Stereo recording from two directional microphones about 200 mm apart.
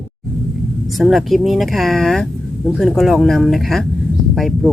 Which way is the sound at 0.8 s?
Centre (ahead or behind).